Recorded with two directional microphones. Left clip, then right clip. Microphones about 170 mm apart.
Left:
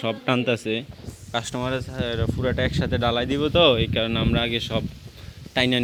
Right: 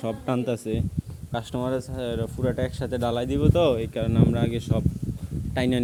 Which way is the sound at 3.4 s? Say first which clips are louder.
Left 4 dB; 5° right (ahead or behind).